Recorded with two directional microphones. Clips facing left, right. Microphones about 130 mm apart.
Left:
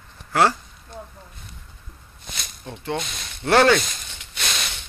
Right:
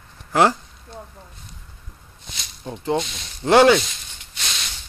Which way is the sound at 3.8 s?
55° left (ahead or behind).